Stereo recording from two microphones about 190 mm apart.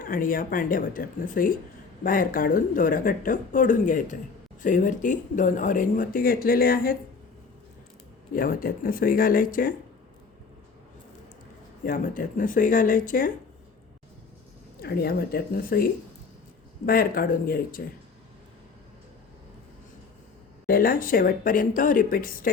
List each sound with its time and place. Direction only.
0.0 s speech: 45° left (ahead or behind)
8.3 s speech: 45° left (ahead or behind)
11.9 s speech: 45° left (ahead or behind)
14.8 s speech: 55° left (ahead or behind)
20.7 s speech: 50° left (ahead or behind)